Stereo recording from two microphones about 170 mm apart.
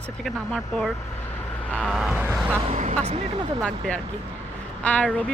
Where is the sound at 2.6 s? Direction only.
40° right (ahead or behind).